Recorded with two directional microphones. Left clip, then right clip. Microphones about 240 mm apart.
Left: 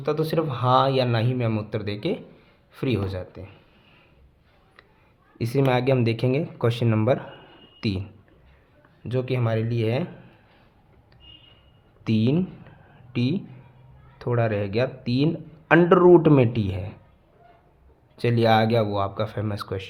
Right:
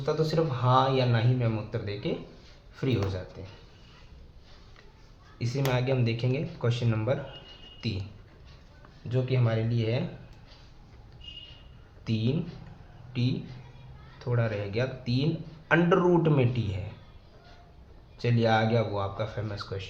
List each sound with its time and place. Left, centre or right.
0.0 s speech: left
5.4 s speech: left
9.0 s speech: left
12.0 s speech: left
18.2 s speech: left